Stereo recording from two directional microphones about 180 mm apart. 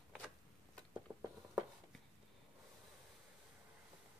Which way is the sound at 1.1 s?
15° right (ahead or behind).